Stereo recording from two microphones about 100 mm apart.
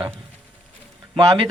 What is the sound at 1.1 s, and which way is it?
Speech, 60° right (ahead or behind).